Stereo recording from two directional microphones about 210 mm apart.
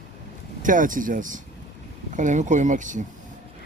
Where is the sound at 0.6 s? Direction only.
40° right (ahead or behind).